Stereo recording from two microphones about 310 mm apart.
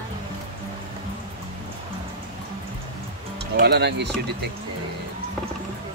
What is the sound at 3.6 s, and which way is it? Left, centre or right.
Speech, right.